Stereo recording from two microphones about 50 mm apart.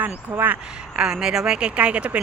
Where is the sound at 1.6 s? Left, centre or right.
Right.